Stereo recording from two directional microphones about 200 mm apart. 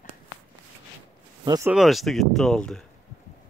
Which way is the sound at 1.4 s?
20° right (ahead or behind).